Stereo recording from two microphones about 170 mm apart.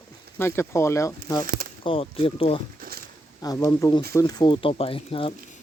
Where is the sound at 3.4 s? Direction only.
20° left (ahead or behind).